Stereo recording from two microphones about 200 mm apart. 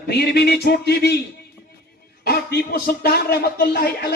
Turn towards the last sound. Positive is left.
turn(degrees=50)  # may be behind; listen again after turning